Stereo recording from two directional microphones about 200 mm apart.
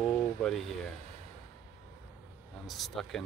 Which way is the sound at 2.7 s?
Centre (ahead or behind).